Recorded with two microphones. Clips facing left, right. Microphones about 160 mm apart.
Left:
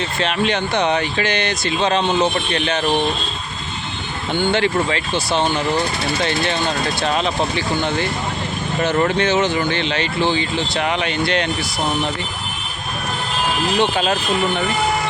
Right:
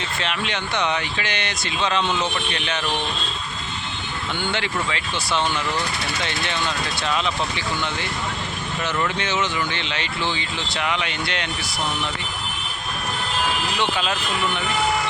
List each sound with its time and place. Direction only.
0.2 s speech: 35° left (ahead or behind)
4.4 s speech: 35° left (ahead or behind)
13.7 s speech: 40° left (ahead or behind)